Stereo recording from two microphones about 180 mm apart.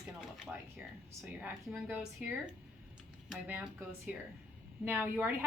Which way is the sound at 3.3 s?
5° right (ahead or behind).